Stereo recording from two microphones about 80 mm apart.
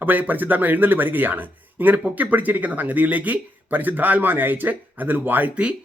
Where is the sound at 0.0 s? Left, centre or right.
Right.